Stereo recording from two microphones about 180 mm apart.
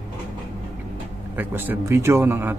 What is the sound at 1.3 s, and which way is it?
Speech, 10° right (ahead or behind).